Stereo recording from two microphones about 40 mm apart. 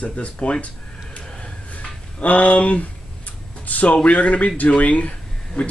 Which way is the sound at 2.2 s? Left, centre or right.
Left.